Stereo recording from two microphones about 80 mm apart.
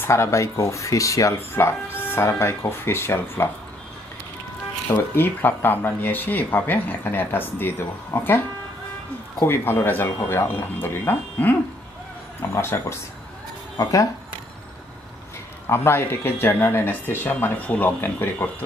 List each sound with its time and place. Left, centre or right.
0.0 s speech: left
1.5 s speech: left
5.1 s speech: left
9.4 s speech: left
15.6 s speech: left